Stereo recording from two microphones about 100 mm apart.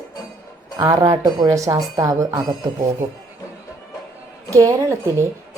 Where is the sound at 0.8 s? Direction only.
40° right (ahead or behind).